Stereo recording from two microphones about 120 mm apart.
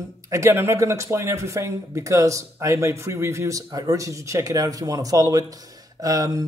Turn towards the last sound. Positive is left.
turn(degrees=-30)  # may be behind; listen again after turning